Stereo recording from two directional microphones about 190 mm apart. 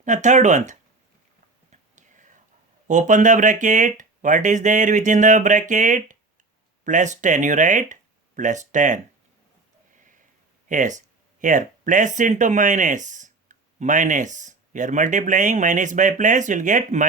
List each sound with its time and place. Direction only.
0.0 s speech: 40° right (ahead or behind)
1.7 s whispering: 40° right (ahead or behind)
2.8 s speech: 40° right (ahead or behind)
10.7 s speech: 40° right (ahead or behind)